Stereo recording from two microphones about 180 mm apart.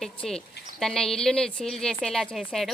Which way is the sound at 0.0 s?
5° left (ahead or behind).